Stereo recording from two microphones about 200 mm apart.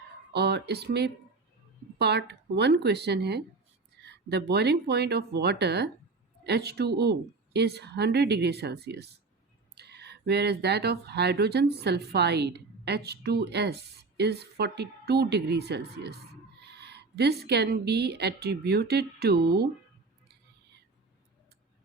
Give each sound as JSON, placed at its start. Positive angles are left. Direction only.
{"t": 0.3, "sound": "a woman's voice", "side_deg": -55}